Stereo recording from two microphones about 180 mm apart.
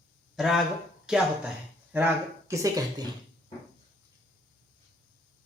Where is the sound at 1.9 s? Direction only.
15° right (ahead or behind).